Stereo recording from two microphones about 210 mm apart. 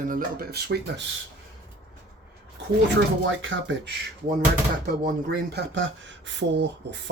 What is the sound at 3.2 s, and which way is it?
Speech, 65° right (ahead or behind).